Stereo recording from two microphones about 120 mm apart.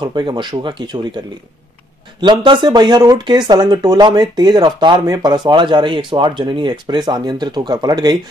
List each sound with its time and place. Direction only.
0.0 s speech: 40° right (ahead or behind)
2.4 s speech: 40° right (ahead or behind)